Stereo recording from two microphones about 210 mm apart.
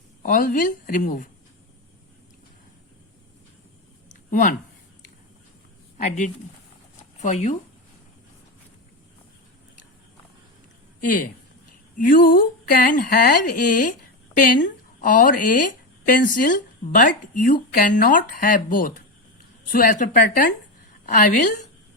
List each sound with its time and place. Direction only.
0.2 s speech: 40° left (ahead or behind)
4.1 s a sound: 40° left (ahead or behind)
6.0 s speech: 35° left (ahead or behind)
11.0 s a woman's voice: 40° left (ahead or behind)